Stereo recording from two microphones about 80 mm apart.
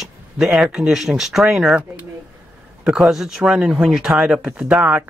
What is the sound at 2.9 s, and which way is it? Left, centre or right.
Speech, centre.